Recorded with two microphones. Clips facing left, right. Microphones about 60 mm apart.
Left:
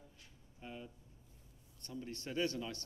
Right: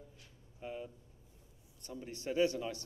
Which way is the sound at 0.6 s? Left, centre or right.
Centre.